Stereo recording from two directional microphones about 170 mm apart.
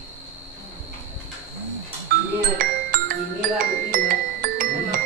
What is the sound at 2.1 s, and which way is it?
Music, 65° right (ahead or behind).